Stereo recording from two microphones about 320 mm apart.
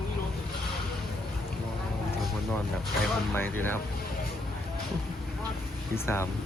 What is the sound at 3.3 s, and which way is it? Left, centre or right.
Speech, centre.